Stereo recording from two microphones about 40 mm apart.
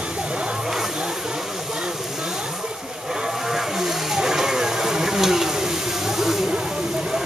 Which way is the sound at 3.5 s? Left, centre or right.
Centre.